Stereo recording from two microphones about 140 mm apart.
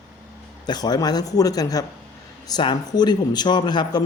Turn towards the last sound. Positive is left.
turn(degrees=30)  # may be behind; listen again after turning